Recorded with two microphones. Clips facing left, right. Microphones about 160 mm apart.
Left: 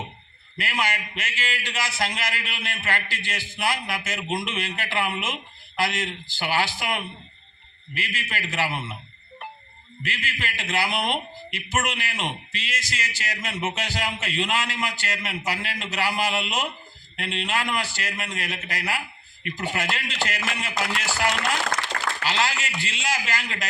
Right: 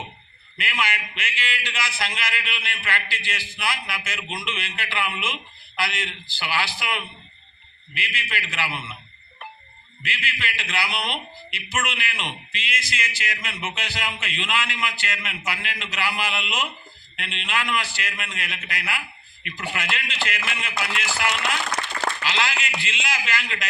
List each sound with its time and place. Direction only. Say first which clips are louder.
0.5 s a man's voice: left 1 dB; 40° left (ahead or behind)
10.0 s speech: even; 45° left (ahead or behind)